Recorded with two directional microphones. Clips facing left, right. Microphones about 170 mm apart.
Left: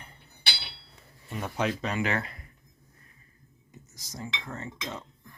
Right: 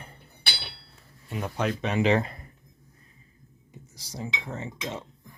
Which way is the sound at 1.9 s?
25° right (ahead or behind).